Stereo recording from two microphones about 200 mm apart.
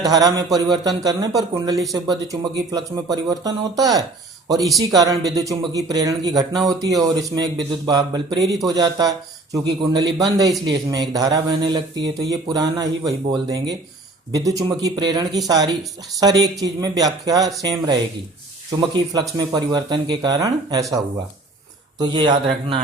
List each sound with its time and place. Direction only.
0.1 s speech: 20° right (ahead or behind)
18.9 s speech: 20° right (ahead or behind)
21.9 s speech: 20° right (ahead or behind)